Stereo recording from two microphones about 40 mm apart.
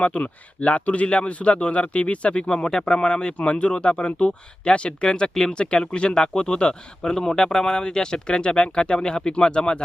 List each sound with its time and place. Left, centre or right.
0.0 s speech: left